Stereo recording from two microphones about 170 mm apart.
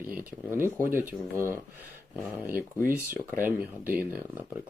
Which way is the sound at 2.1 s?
5° right (ahead or behind).